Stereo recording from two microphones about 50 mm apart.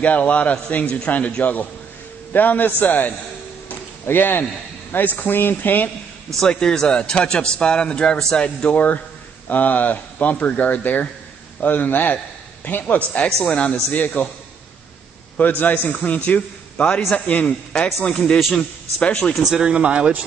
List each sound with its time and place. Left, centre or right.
0.0 s a man's voice: left
3.6 s a sound: left
4.9 s speech: left
6.4 s a man's voice: centre
8.5 s a man's voice: left
13.8 s speech: left
15.3 s a man's voice: left
19.4 s speech: centre